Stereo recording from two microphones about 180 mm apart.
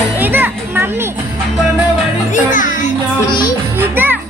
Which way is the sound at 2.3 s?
45° left (ahead or behind).